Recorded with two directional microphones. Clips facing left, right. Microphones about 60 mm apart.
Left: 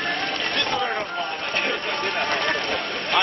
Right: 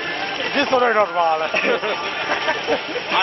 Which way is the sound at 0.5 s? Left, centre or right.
Right.